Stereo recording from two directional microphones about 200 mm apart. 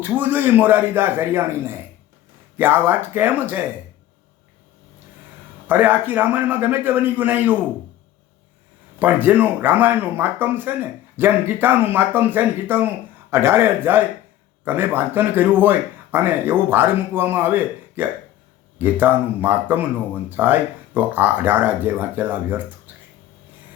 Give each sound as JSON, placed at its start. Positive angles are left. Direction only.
{"t": 0.0, "sound": "speech", "side_deg": -10}
{"t": 5.6, "sound": "speech", "side_deg": -10}
{"t": 9.0, "sound": "speech", "side_deg": -10}
{"t": 22.9, "sound": "a sound", "side_deg": -10}